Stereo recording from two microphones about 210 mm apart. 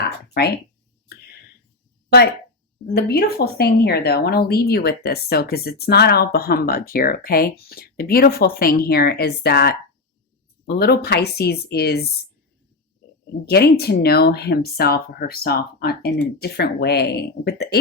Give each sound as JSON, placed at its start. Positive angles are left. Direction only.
{"t": 0.4, "sound": "speech", "side_deg": 50}
{"t": 2.9, "sound": "speech", "side_deg": 50}
{"t": 13.4, "sound": "speech", "side_deg": 50}